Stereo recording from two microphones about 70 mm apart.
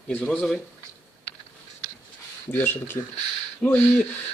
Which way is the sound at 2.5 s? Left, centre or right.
Left.